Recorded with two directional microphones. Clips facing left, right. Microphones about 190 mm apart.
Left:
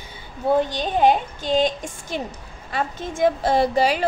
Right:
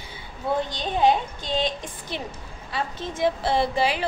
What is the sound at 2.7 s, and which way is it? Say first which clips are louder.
A woman's voice: left 4 dB; 50° left (ahead or behind).